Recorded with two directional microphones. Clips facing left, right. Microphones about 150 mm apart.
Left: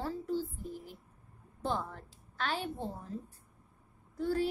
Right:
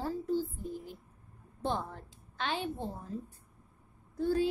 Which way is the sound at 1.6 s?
20° right (ahead or behind).